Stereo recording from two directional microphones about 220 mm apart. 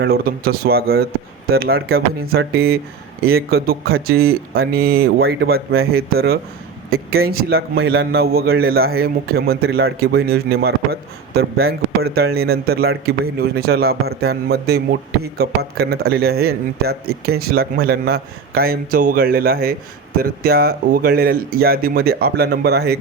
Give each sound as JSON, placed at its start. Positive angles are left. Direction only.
{"t": 0.0, "sound": "speech", "side_deg": -45}